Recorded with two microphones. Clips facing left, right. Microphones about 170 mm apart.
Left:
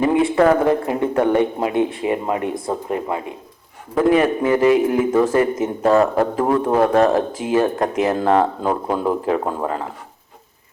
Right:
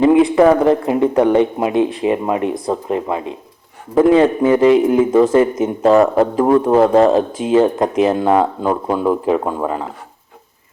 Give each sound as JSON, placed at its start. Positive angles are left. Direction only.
{"t": 0.0, "sound": "a man's voice", "side_deg": -20}